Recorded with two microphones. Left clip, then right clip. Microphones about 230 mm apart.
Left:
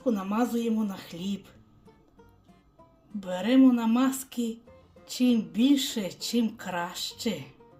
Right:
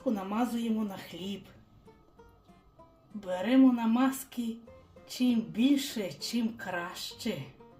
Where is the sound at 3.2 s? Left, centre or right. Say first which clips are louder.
Left 3 dB; left.